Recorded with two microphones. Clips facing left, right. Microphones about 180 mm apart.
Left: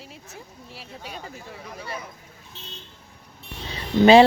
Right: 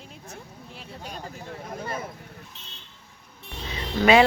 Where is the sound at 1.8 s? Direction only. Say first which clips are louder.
Right 2 dB; 50° right (ahead or behind).